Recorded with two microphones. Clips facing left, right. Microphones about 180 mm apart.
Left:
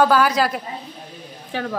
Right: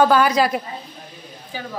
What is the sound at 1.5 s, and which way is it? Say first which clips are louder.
Speech: left 6 dB; 75° left (ahead or behind).